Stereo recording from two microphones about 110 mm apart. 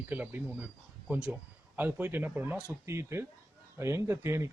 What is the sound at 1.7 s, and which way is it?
Speech, 20° right (ahead or behind).